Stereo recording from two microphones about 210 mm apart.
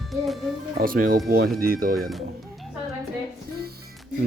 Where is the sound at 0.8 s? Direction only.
40° right (ahead or behind).